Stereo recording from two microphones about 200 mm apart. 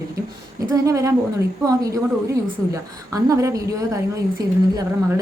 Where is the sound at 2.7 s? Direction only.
15° right (ahead or behind).